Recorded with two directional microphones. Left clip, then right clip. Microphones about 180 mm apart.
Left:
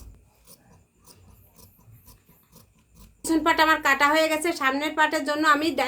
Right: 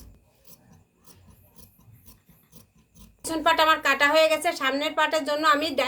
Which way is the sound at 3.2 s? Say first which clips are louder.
Left 1 dB; 15° left (ahead or behind).